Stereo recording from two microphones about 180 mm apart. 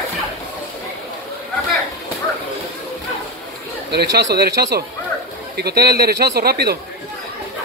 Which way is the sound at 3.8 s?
65° right (ahead or behind).